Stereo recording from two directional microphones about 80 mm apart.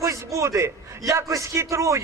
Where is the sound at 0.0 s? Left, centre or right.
Right.